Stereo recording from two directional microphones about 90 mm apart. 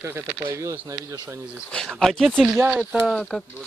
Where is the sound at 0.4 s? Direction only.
30° right (ahead or behind).